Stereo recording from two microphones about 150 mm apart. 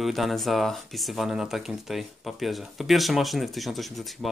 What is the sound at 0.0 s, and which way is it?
Speech, centre (ahead or behind).